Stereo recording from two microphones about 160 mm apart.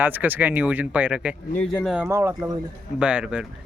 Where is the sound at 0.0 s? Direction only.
10° right (ahead or behind).